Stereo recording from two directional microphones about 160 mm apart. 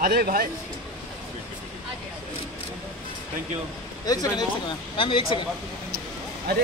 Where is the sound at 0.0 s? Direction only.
65° right (ahead or behind).